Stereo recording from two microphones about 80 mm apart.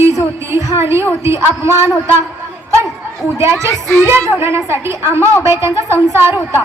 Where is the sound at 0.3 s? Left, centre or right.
Right.